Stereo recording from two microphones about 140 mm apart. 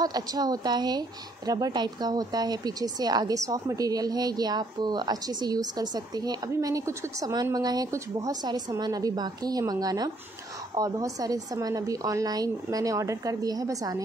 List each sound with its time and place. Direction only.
0.0 s speech: 30° right (ahead or behind)